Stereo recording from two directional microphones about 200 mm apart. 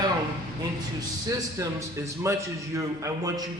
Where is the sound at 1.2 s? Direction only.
15° right (ahead or behind).